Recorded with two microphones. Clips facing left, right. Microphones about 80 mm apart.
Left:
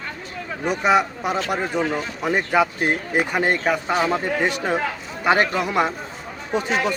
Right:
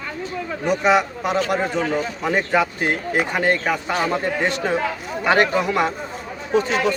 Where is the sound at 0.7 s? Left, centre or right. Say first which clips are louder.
Right 1 dB; centre.